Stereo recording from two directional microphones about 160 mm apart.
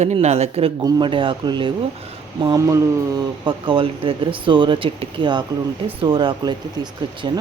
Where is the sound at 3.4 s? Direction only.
30° right (ahead or behind).